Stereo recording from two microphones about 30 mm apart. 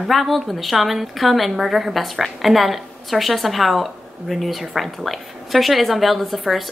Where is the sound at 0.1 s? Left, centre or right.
Centre.